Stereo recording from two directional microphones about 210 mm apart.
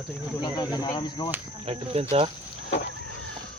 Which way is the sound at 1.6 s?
30° right (ahead or behind).